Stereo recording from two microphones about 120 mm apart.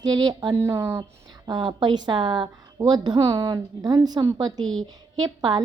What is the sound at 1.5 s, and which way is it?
A woman's voice, 40° right (ahead or behind).